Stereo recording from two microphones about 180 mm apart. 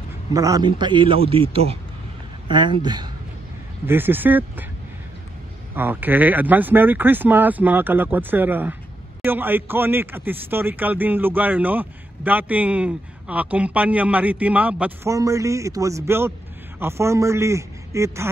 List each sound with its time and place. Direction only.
0.3 s a man's voice: 20° right (ahead or behind)
3.8 s speech: 10° right (ahead or behind)
5.8 s speech: 10° right (ahead or behind)